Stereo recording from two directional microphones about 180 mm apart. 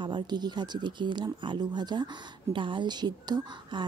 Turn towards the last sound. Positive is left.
turn(degrees=-25)  # may be behind; listen again after turning